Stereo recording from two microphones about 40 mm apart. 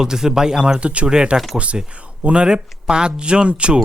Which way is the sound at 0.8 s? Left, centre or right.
Right.